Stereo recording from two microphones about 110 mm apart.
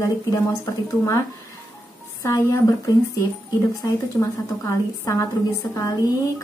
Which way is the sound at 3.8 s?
25° left (ahead or behind).